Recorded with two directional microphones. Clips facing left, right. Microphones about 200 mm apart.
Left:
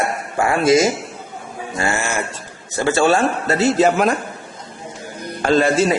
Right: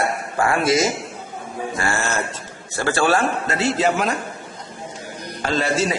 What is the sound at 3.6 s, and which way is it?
Speech, 45° left (ahead or behind).